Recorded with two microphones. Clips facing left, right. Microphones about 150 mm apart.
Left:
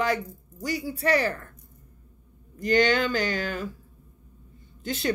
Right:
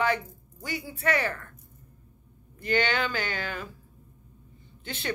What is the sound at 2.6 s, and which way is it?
Speech, 40° left (ahead or behind).